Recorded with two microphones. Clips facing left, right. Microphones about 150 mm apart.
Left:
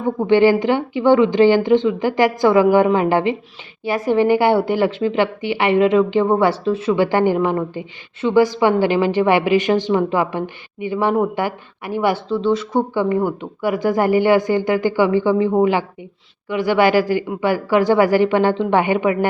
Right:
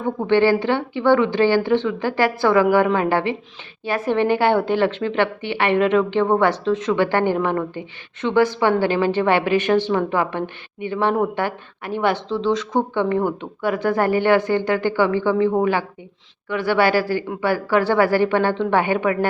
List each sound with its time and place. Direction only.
0.0 s a woman's voice: 10° left (ahead or behind)